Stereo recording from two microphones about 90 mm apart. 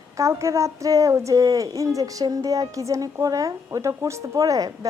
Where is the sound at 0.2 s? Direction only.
35° right (ahead or behind).